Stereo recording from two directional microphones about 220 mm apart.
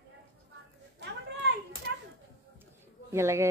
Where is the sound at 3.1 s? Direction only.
10° right (ahead or behind).